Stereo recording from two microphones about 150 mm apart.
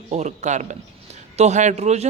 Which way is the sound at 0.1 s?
50° right (ahead or behind).